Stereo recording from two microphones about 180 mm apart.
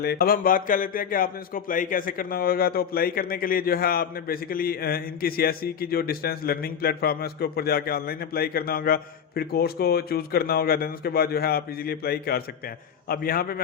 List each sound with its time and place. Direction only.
0.0 s speech: 60° left (ahead or behind)